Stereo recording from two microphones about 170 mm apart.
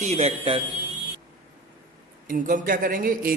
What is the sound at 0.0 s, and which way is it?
Speech, 40° right (ahead or behind).